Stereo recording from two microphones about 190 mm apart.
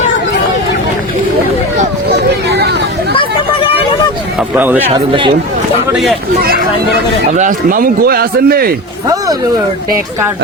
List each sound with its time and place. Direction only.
2.5 s a sound: 60° right (ahead or behind)
4.4 s speech: 5° right (ahead or behind)
4.9 s speech: 25° right (ahead or behind)
5.9 s speech: centre (ahead or behind)
6.4 s speech: 55° right (ahead or behind)